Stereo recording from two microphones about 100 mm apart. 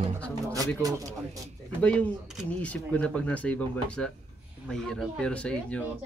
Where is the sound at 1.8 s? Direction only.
15° left (ahead or behind).